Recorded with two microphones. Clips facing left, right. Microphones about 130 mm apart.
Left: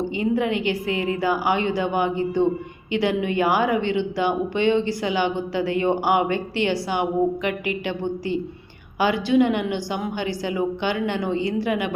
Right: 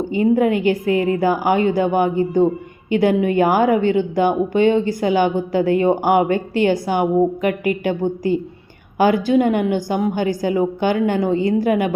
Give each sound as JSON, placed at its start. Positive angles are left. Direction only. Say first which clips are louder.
{"t": 0.0, "sound": "a woman's voice", "louder": "right 6 dB", "side_deg": -45}